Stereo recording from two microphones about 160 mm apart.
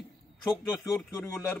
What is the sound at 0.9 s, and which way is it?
Speech, 15° left (ahead or behind).